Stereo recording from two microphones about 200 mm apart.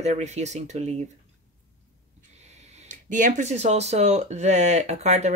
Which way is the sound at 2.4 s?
35° right (ahead or behind).